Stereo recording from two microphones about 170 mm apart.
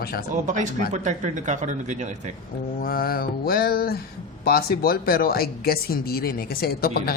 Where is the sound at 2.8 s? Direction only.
60° left (ahead or behind).